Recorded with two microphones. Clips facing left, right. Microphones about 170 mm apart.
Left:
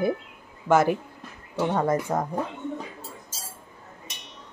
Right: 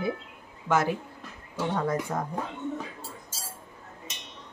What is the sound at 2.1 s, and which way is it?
Speech, 40° left (ahead or behind).